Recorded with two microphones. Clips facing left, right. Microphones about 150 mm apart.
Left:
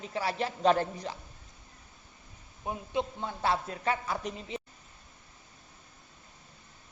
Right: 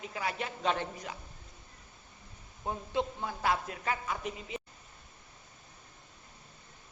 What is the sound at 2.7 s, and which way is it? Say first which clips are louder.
A man's voice: even; 20° left (ahead or behind).